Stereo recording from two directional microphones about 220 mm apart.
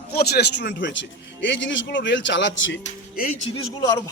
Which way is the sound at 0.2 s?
45° left (ahead or behind).